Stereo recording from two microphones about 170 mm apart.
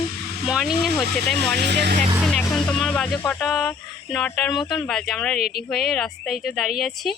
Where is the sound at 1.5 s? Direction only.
80° right.